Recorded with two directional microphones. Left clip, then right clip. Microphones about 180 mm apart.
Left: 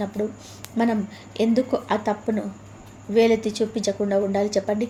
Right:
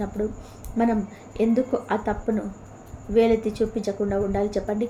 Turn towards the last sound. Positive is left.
turn(degrees=25)  # may be behind; listen again after turning